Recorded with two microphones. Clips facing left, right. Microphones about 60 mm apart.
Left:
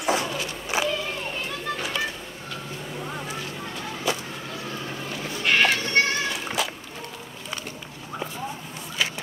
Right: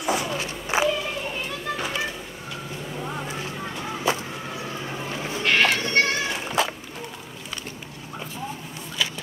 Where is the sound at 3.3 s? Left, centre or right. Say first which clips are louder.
Right 2 dB; right.